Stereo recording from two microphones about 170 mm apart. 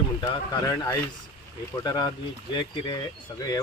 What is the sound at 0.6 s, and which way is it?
Speech, 20° left (ahead or behind).